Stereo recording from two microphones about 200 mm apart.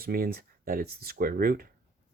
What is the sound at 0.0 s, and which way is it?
Speech, 50° right (ahead or behind).